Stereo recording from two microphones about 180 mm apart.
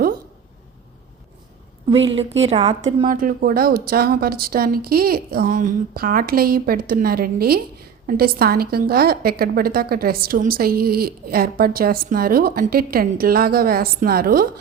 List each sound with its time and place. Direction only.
2.4 s a woman's voice: 35° right (ahead or behind); by 14.4 s 55° right (ahead or behind)